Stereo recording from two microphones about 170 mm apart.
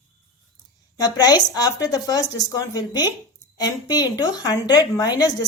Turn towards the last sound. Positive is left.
turn(degrees=20)  # may be behind; listen again after turning